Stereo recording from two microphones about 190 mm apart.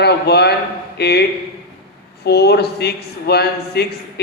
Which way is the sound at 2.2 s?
60° left (ahead or behind).